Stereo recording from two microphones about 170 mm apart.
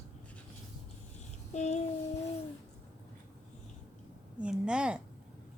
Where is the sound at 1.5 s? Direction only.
40° left (ahead or behind).